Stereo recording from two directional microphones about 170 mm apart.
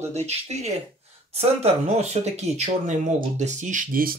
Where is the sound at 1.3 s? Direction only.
40° right (ahead or behind).